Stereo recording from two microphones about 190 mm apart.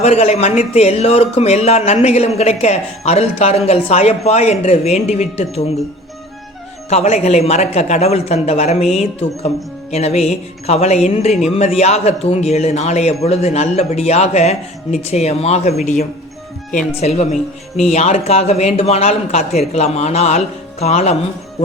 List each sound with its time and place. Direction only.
0.0 s speech: 35° left (ahead or behind)
6.9 s speech: 35° left (ahead or behind)